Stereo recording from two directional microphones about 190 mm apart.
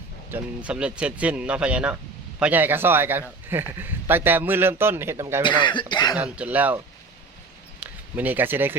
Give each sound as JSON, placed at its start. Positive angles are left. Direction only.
{"t": 0.3, "sound": "speech", "side_deg": -10}
{"t": 5.4, "sound": "speech", "side_deg": 25}
{"t": 6.1, "sound": "speech", "side_deg": -5}
{"t": 7.8, "sound": "a sound", "side_deg": -10}